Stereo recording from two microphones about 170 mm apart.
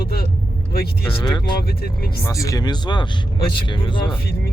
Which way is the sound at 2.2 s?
20° left (ahead or behind).